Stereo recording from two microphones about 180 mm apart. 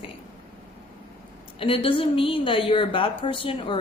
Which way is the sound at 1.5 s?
30° left (ahead or behind).